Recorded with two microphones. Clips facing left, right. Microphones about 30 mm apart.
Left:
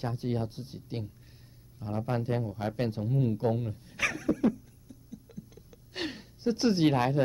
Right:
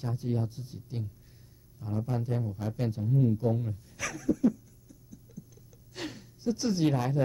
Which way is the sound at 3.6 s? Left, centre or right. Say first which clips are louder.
Left 5 dB; left.